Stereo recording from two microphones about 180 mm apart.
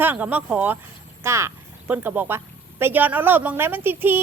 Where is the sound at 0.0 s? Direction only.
10° right (ahead or behind).